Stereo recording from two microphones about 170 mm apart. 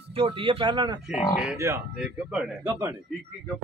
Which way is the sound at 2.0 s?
5° right (ahead or behind).